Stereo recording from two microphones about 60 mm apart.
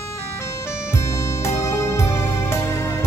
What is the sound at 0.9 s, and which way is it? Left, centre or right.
Music, left.